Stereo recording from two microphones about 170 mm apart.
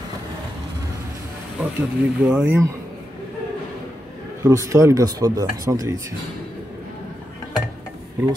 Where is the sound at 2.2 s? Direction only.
5° right (ahead or behind).